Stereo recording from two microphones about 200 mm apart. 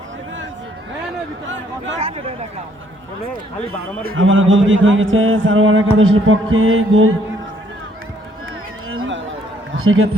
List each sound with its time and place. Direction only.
2.0 s speech: 30° right (ahead or behind)
4.1 s speech: 75° right (ahead or behind)
8.9 s a sound: 80° right
9.7 s a man's voice: 90° right